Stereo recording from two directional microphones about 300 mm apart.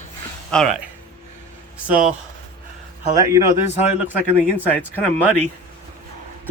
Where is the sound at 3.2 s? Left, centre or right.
Centre.